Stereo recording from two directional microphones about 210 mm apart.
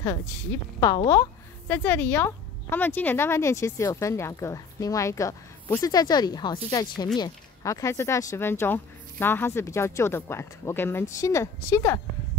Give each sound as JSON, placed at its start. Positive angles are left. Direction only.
{"t": 0.0, "sound": "speech", "side_deg": 15}